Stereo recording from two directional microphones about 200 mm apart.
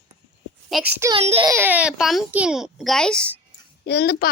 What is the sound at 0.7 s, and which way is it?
Speech, centre (ahead or behind).